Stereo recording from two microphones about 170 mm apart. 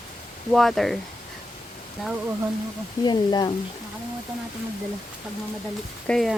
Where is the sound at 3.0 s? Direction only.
25° left (ahead or behind).